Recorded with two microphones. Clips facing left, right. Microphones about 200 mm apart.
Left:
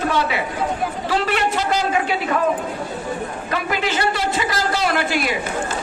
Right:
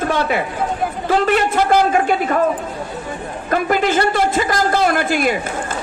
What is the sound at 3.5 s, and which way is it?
A man's voice, 50° right (ahead or behind).